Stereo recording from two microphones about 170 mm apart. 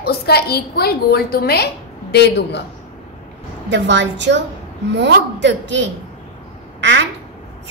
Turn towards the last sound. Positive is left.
turn(degrees=-90)